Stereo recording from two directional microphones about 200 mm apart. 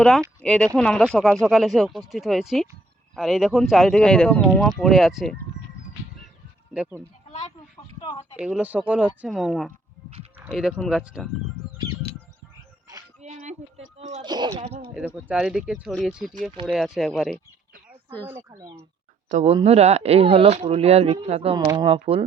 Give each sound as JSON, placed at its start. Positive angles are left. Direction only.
{"t": 0.4, "sound": "speech", "side_deg": 5}
{"t": 8.0, "sound": "speech", "side_deg": 25}
{"t": 8.4, "sound": "speech", "side_deg": -5}
{"t": 13.2, "sound": "a sound", "side_deg": -35}
{"t": 14.0, "sound": "speech", "side_deg": -25}
{"t": 14.9, "sound": "speech", "side_deg": -5}
{"t": 16.5, "sound": "speech", "side_deg": -30}
{"t": 16.7, "sound": "speech", "side_deg": 0}
{"t": 18.3, "sound": "speech", "side_deg": -15}
{"t": 19.3, "sound": "speech", "side_deg": -30}